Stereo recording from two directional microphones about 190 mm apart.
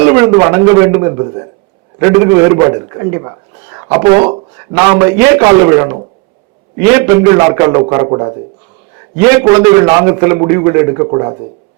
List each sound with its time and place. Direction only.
0.0 s a man's voice: 10° right (ahead or behind)
9.1 s a man's voice: 10° right (ahead or behind)